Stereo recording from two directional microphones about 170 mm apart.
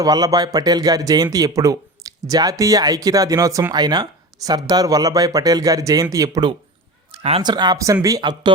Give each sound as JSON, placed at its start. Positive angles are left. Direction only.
{"t": 0.0, "sound": "speech", "side_deg": -20}
{"t": 7.1, "sound": "speech", "side_deg": -35}